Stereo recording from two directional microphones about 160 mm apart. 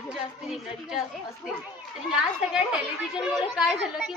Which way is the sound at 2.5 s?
5° right (ahead or behind).